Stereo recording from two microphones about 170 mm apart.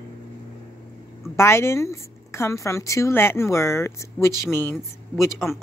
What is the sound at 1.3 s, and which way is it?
A woman's voice, 15° left (ahead or behind).